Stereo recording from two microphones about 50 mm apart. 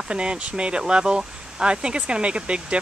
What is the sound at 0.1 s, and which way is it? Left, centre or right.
Speech, right.